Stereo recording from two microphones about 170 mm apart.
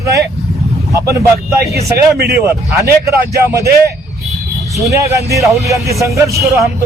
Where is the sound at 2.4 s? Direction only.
15° right (ahead or behind).